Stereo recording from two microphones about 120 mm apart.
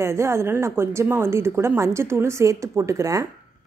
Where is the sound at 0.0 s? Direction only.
20° right (ahead or behind).